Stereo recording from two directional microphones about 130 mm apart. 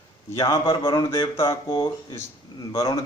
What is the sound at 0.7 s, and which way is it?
Speech, 40° left (ahead or behind).